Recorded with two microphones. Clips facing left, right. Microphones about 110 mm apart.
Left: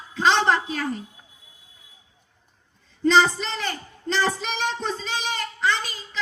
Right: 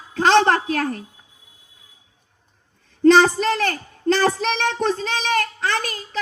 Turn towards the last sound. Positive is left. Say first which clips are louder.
# right 1 dB
turn(degrees=-70)  # may be behind; listen again after turning